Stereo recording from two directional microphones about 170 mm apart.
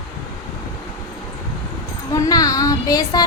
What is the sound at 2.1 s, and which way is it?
Speech, 20° left (ahead or behind).